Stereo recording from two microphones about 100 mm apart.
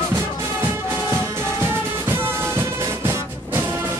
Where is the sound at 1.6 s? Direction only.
25° right (ahead or behind).